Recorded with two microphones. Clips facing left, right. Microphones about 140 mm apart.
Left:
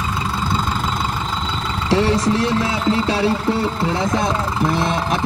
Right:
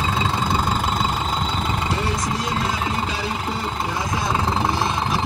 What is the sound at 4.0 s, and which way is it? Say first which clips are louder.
Speech: left 5 dB; 60° left (ahead or behind).